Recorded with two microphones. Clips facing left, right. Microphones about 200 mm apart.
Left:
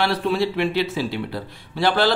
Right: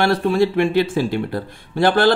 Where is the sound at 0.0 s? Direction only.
50° right (ahead or behind).